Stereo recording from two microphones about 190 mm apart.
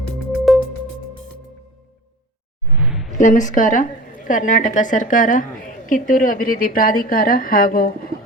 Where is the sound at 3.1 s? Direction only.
40° left (ahead or behind).